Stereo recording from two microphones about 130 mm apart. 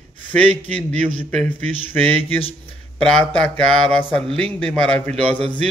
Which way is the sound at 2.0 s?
15° left (ahead or behind).